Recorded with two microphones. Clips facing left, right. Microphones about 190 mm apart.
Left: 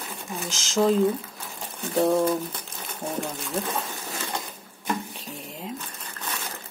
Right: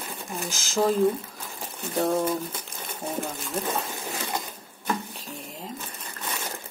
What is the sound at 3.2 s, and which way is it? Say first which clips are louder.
Speech: left 1 dB; centre (ahead or behind).